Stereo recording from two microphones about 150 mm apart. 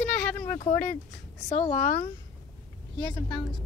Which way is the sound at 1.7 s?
65° left (ahead or behind).